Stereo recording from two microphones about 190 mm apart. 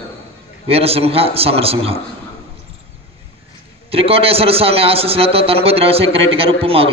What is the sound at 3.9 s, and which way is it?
A man's voice, 30° right (ahead or behind).